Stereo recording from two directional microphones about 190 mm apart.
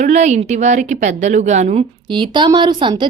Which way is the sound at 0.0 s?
40° right (ahead or behind).